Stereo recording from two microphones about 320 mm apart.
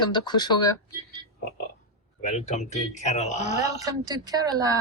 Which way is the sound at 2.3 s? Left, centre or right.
Left.